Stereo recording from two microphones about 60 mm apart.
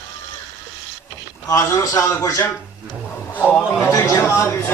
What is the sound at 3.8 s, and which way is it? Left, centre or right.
Speech, left.